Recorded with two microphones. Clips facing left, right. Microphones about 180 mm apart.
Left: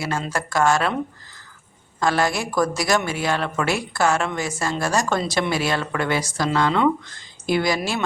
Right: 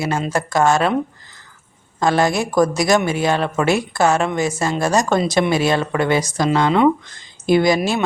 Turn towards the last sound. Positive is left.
turn(degrees=-20)  # may be behind; listen again after turning